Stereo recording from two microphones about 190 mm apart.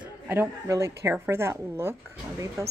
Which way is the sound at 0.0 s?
10° right (ahead or behind).